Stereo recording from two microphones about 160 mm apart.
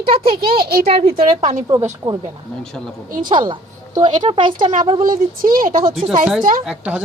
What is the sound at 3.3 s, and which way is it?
A woman's voice, 30° right (ahead or behind).